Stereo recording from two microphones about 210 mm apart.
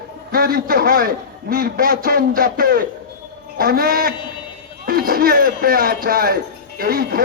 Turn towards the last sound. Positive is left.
turn(degrees=-45)  # may be behind; listen again after turning